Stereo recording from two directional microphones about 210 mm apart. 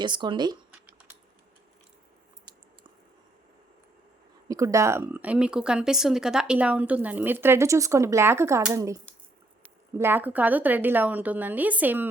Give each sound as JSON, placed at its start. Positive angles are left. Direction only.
{"t": 0.0, "sound": "speech", "side_deg": -20}
{"t": 4.4, "sound": "speech", "side_deg": -15}
{"t": 10.0, "sound": "speech", "side_deg": -10}